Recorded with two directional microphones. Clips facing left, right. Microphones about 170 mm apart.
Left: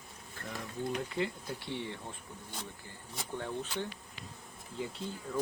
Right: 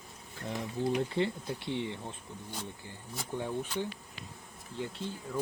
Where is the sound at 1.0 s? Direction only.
30° right (ahead or behind).